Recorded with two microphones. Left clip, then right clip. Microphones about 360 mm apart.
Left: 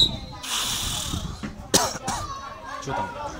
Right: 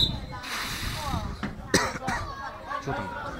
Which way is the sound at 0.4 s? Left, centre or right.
Centre.